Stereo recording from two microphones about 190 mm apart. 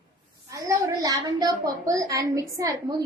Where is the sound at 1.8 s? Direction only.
15° right (ahead or behind).